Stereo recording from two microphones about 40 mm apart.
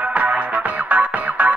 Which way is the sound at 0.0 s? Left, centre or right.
Right.